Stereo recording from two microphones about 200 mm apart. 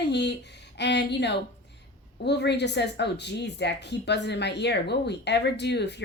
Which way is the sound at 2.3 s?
60° left (ahead or behind).